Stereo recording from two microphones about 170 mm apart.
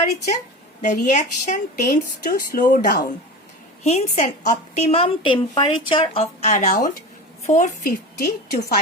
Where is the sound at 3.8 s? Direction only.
40° left (ahead or behind).